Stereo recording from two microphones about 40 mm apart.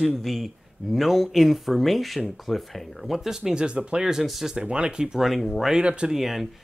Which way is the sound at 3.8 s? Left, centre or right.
Right.